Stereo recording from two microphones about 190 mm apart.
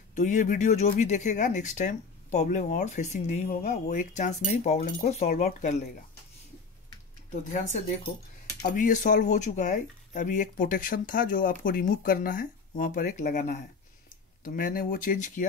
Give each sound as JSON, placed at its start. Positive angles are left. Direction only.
{"t": 0.1, "sound": "speech", "side_deg": 40}
{"t": 7.5, "sound": "speech", "side_deg": 40}